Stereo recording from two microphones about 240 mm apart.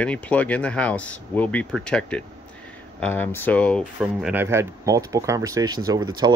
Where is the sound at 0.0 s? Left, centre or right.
Centre.